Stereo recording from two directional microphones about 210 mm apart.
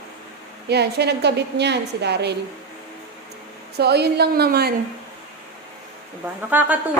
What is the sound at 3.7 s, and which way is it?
Speech, 50° right (ahead or behind).